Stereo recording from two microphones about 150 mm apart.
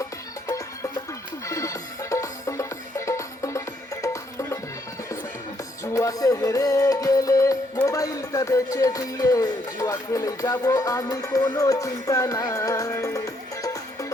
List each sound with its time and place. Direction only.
0.4 s music: 20° left (ahead or behind)
5.8 s music: 20° left (ahead or behind)